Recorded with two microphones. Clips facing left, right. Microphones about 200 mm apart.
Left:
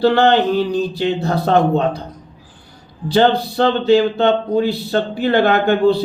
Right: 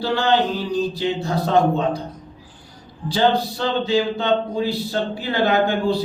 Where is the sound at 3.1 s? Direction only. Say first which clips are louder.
Left 4 dB; 60° left (ahead or behind).